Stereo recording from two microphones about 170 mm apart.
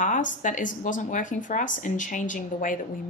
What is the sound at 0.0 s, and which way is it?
Speech, 50° left (ahead or behind).